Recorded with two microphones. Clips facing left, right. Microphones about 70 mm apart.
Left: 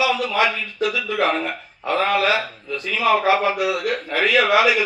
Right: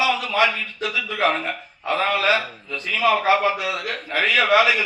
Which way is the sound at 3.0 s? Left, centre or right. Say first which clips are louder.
Left 1 dB; left.